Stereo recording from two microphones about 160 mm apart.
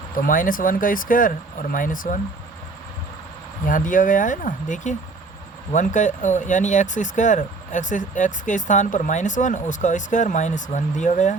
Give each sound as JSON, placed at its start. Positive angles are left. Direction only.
{"t": 0.2, "sound": "speech", "side_deg": 60}
{"t": 3.7, "sound": "speech", "side_deg": 55}